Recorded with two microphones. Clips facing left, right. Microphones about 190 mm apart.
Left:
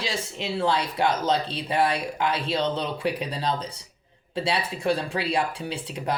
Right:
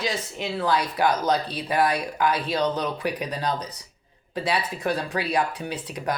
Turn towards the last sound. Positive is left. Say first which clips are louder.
# even
turn(degrees=30)  # may be behind; listen again after turning